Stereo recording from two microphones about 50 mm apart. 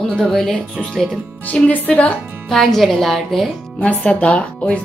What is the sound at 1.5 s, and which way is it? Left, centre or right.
Speech, left.